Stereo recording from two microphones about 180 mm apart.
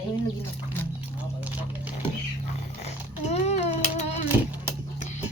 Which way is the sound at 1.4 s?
10° right (ahead or behind).